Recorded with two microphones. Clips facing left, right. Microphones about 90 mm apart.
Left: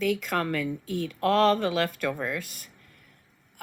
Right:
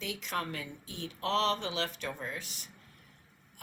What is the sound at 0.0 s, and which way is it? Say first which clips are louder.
Speech: left 10 dB; 50° left (ahead or behind).